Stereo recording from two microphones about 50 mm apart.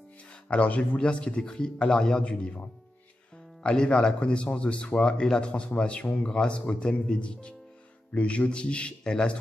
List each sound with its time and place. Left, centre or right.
0.3 s speech: left
3.6 s speech: centre